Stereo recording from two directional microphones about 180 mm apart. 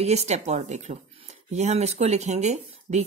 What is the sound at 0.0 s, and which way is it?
Speech, 35° right (ahead or behind).